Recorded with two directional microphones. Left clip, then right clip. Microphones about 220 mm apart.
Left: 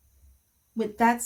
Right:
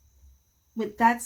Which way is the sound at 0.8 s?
15° left (ahead or behind).